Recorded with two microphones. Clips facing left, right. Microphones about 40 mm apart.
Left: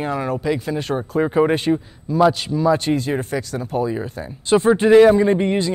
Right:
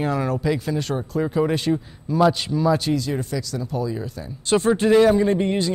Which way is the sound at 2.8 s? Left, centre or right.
Left.